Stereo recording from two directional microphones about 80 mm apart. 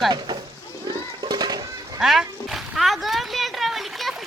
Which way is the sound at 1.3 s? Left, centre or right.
Right.